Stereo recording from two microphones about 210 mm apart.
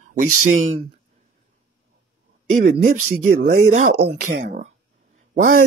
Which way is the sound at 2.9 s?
90° right.